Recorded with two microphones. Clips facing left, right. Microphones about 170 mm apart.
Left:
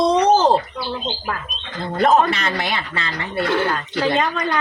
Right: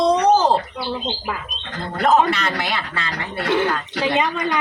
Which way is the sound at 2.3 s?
20° left (ahead or behind).